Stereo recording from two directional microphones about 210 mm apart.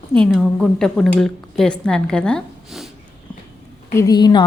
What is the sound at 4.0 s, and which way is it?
Speech, 20° left (ahead or behind).